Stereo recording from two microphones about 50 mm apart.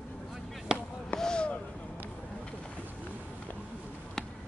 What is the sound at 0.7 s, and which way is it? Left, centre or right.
Basketball bounce, centre.